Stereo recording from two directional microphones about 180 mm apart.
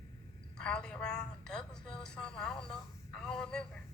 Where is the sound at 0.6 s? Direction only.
5° left (ahead or behind).